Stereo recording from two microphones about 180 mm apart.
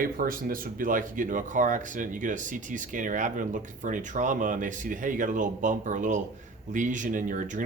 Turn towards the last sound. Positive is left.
turn(degrees=-45)  # may be behind; listen again after turning